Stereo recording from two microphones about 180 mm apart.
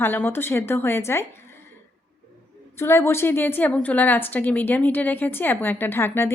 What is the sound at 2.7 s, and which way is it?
A woman's voice, 15° left (ahead or behind).